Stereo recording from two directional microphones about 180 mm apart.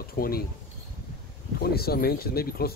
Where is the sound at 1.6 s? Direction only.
60° left (ahead or behind).